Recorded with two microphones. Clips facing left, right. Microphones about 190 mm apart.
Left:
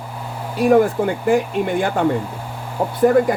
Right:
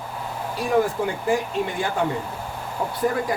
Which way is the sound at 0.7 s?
55° left (ahead or behind).